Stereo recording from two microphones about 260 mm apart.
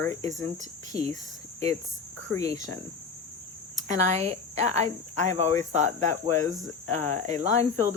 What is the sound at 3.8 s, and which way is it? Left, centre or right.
Speech, right.